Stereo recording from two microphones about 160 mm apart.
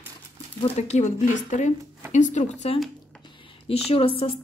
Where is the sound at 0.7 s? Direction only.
45° left (ahead or behind).